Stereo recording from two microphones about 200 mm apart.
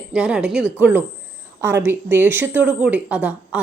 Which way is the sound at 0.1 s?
5° right (ahead or behind).